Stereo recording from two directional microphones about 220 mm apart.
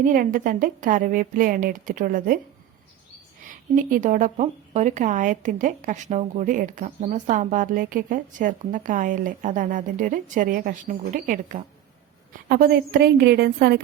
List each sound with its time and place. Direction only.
0.0 s speech: 40° right (ahead or behind)
3.4 s a woman's voice: 35° right (ahead or behind)